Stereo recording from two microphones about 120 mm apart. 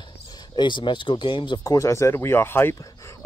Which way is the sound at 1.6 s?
25° left (ahead or behind).